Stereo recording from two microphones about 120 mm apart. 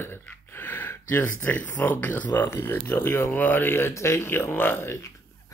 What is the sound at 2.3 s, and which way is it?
Speech, 20° left (ahead or behind).